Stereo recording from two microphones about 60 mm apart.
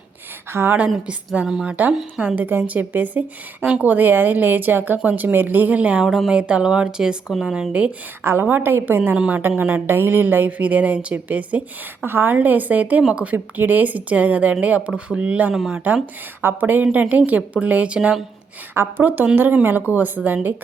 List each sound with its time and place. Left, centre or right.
0.5 s a woman's voice: right
1.5 s speech: centre
2.2 s a woman's voice: right
6.1 s speech: centre
7.7 s a woman's voice: right
8.2 s a woman's voice: right
9.1 s a woman's voice: centre
9.8 s a woman's voice: right
12.0 s a woman's voice: right; by 13.3 s centre
13.3 s a woman's voice: right
15.5 s speech: centre
16.4 s a woman's voice: right
18.7 s a woman's voice: right